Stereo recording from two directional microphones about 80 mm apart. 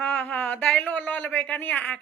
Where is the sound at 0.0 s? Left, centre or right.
Centre.